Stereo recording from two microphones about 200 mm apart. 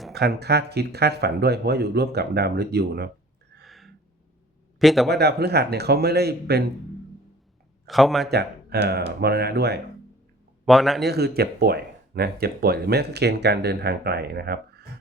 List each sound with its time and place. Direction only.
0.1 s speech: 55° right (ahead or behind)
3.6 s gasp: centre (ahead or behind)
4.8 s a man's voice: centre (ahead or behind)
5.0 s speech: 55° right (ahead or behind)
7.9 s speech: centre (ahead or behind)
8.3 s speech: 55° right (ahead or behind)
10.7 s speech: centre (ahead or behind)
11.0 s speech: 55° right (ahead or behind)